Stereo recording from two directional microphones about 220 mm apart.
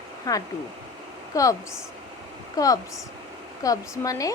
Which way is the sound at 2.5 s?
15° left (ahead or behind).